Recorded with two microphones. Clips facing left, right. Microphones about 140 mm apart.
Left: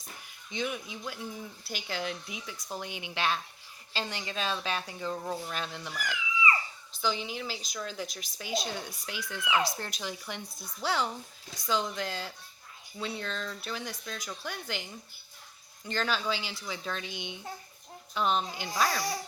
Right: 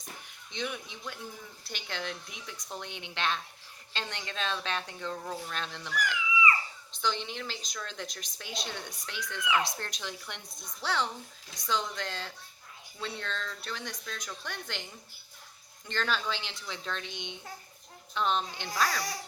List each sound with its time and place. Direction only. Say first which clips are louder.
0.5 s a woman's voice: left 3 dB; 5° left (ahead or behind)
6.9 s a woman's voice: left 1 dB; 5° left (ahead or behind)
9.4 s speech: left 1 dB; 25° left (ahead or behind)
9.6 s a woman's voice: left 3 dB; 5° left (ahead or behind)
15.9 s speech: left 1 dB; 5° left (ahead or behind)
18.7 s speech: left 1 dB; 25° left (ahead or behind)